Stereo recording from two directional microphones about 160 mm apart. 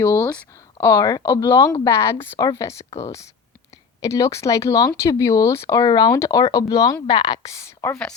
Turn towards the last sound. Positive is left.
turn(degrees=15)  # may be behind; listen again after turning